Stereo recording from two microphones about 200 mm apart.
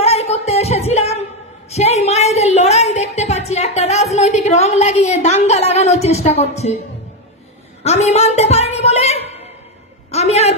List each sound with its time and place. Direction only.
0.0 s music: 30° left (ahead or behind)
1.7 s speech: 35° left (ahead or behind)
7.8 s a woman's voice: 35° left (ahead or behind)
10.1 s a sound: 30° left (ahead or behind)